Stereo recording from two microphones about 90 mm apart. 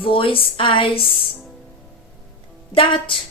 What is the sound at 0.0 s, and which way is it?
A woman's voice, 80° left.